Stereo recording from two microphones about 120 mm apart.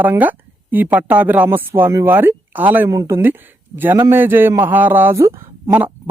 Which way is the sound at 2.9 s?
25° right (ahead or behind).